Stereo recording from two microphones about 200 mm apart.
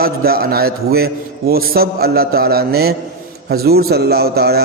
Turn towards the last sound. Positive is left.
turn(degrees=-50)  # may be behind; listen again after turning